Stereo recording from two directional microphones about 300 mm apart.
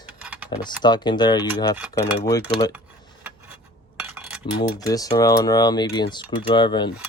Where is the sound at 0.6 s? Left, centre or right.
Centre.